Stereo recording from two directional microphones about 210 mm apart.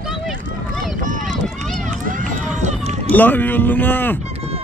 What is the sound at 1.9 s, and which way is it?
Run, 35° right (ahead or behind).